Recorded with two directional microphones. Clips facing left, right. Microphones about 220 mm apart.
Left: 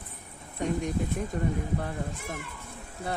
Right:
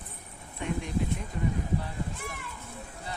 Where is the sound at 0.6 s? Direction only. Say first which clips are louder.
Left 4 dB; 40° left (ahead or behind).